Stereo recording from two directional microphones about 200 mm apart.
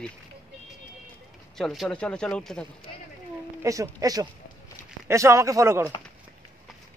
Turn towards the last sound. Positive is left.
turn(degrees=-15)  # may be behind; listen again after turning